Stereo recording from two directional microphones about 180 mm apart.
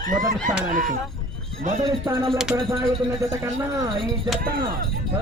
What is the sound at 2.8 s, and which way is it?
A man's voice, 15° right (ahead or behind).